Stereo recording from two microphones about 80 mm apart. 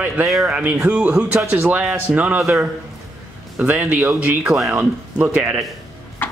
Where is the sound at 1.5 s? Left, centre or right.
Right.